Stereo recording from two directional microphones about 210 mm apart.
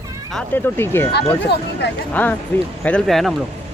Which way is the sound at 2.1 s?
10° left (ahead or behind).